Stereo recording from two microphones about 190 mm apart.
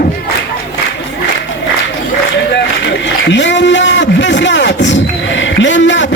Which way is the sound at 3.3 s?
70° left (ahead or behind).